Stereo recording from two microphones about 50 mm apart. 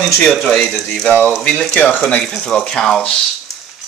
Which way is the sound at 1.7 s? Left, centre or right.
Left.